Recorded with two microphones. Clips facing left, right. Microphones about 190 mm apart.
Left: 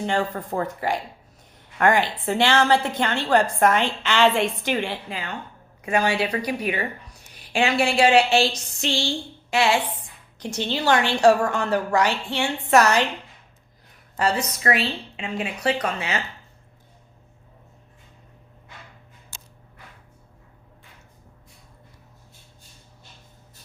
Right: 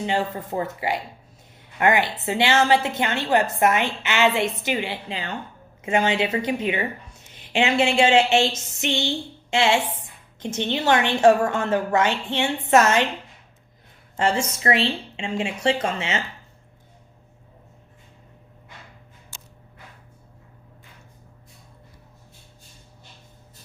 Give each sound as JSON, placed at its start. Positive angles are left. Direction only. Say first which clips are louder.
{"t": 0.0, "sound": "a woman's voice", "louder": "even", "side_deg": -10}
{"t": 2.1, "sound": "a woman's voice", "louder": "even", "side_deg": -10}
{"t": 5.0, "sound": "a woman's voice", "louder": "right 2 dB", "side_deg": -30}
{"t": 14.2, "sound": "a woman's voice", "louder": "right 1 dB", "side_deg": -25}